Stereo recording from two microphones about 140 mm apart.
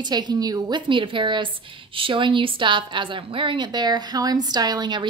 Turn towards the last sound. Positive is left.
turn(degrees=-30)  # may be behind; listen again after turning